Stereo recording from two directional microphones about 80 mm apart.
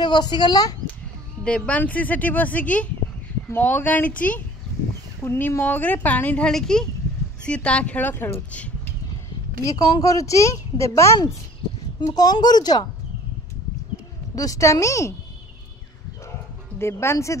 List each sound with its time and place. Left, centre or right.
0.0 s speech: left
1.4 s speech: centre
5.2 s speech: left
6.5 s speech: centre
9.7 s speech: left
12.2 s speech: left
14.3 s speech: left
16.7 s speech: left